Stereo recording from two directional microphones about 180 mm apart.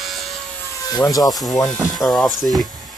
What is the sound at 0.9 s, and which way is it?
Speech, 20° left (ahead or behind).